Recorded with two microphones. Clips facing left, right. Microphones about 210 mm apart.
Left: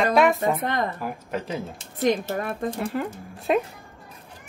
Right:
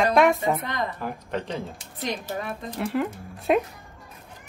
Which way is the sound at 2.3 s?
50° left (ahead or behind).